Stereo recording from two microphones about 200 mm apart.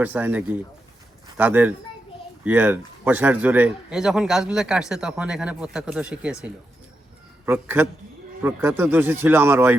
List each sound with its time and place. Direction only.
0.0 s a man's voice: 10° right (ahead or behind)